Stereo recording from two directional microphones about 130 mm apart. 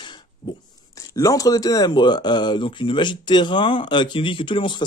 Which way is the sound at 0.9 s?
25° left (ahead or behind).